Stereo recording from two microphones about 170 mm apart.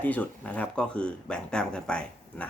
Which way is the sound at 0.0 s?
10° left (ahead or behind).